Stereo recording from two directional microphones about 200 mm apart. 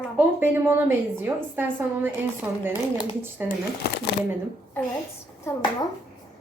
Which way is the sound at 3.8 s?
55° left (ahead or behind).